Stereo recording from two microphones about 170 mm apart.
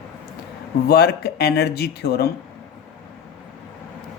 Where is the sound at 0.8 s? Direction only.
70° left (ahead or behind).